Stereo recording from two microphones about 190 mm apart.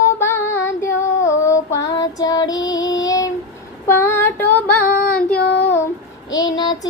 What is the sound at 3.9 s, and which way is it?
Female singing, 10° left (ahead or behind).